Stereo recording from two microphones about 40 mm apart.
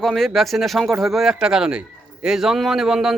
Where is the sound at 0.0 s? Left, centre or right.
Centre.